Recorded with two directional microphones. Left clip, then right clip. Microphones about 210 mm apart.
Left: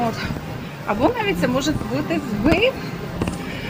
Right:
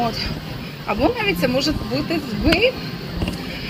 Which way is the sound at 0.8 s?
15° left (ahead or behind).